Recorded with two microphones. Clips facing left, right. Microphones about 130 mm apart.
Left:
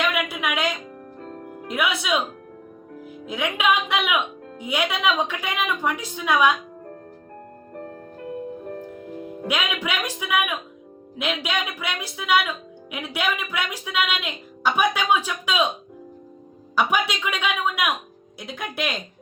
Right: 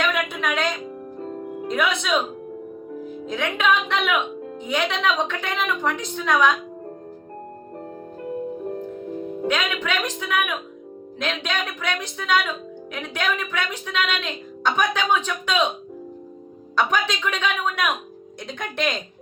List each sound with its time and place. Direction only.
0.0 s music: 5° left (ahead or behind)
1.2 s music: 10° right (ahead or behind)
1.6 s music: 5° left (ahead or behind)
3.2 s a woman's voice: 10° left (ahead or behind)
8.6 s music: 15° right (ahead or behind)
9.5 s a woman's voice: 10° left (ahead or behind)
16.7 s a woman's voice: 10° left (ahead or behind)